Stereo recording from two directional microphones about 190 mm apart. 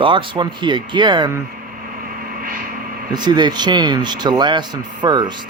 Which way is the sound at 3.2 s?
25° right (ahead or behind).